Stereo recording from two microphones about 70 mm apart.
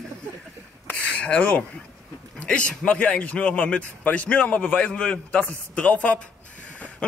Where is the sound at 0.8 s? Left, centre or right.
Left.